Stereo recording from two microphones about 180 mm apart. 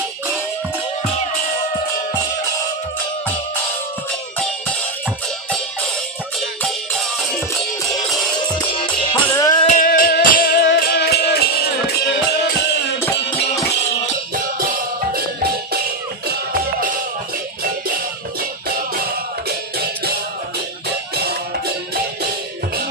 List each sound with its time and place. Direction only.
6.6 s music: 5° left (ahead or behind)
9.2 s music: 15° left (ahead or behind)
9.7 s music: 50° left (ahead or behind)
14.3 s music: 50° right (ahead or behind)